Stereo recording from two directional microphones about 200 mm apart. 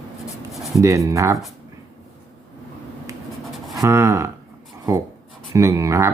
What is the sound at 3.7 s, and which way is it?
Speech, 15° right (ahead or behind).